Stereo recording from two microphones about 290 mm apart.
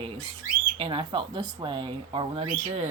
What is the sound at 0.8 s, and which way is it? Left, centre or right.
Speech, centre.